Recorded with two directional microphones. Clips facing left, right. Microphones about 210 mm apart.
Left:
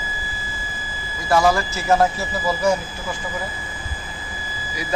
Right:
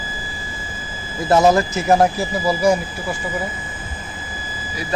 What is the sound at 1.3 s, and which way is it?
Speech, 20° right (ahead or behind).